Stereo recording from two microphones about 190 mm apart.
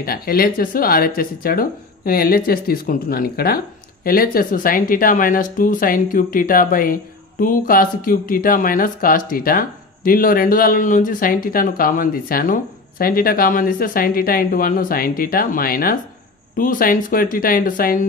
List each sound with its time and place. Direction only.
0.0 s speech: 50° left (ahead or behind)